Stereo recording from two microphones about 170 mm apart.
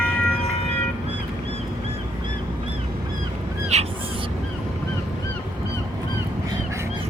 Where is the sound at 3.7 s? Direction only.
40° right (ahead or behind).